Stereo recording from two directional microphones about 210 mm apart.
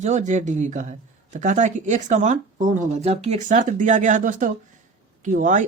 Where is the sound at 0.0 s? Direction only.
35° right (ahead or behind).